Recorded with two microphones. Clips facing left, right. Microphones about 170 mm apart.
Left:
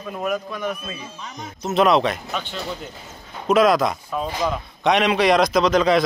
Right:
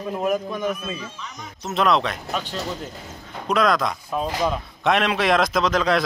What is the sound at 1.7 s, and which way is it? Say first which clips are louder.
Speech: left 4 dB; 5° left (ahead or behind).